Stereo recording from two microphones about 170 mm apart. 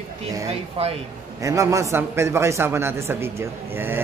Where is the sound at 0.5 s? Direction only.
35° right (ahead or behind).